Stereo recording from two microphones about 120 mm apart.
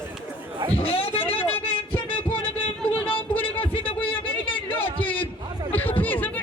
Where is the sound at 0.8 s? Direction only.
50° left (ahead or behind).